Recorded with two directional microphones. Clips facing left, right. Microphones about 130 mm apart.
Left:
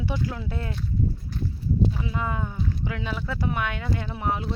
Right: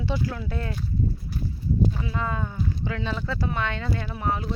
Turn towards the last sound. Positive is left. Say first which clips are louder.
# even
turn(degrees=20)  # may be behind; listen again after turning